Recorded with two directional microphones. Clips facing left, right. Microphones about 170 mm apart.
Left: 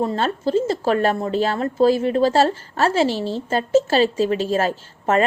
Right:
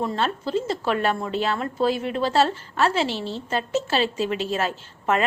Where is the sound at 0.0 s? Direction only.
40° left (ahead or behind).